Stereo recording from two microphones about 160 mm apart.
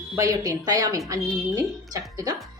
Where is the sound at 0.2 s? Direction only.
20° right (ahead or behind).